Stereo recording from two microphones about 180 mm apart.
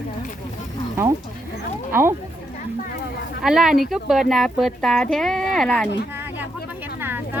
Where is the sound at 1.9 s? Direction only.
15° right (ahead or behind).